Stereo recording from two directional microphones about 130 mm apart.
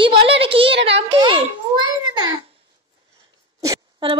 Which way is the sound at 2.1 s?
35° right (ahead or behind).